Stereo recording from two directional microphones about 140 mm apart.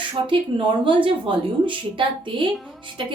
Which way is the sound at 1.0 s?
35° right (ahead or behind).